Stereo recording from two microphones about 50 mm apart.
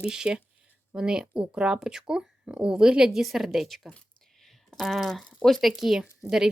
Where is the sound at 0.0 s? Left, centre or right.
Centre.